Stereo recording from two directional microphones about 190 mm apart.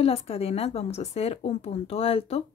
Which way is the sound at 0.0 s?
30° left (ahead or behind).